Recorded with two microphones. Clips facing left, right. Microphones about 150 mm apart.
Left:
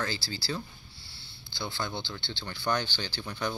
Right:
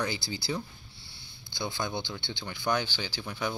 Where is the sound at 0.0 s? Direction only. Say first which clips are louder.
Right 2 dB; 20° right (ahead or behind).